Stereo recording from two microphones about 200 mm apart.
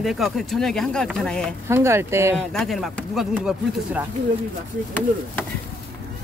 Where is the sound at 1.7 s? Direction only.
15° right (ahead or behind).